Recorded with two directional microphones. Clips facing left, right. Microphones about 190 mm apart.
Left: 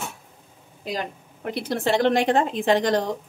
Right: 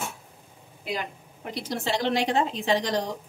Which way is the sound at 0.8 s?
40° left (ahead or behind).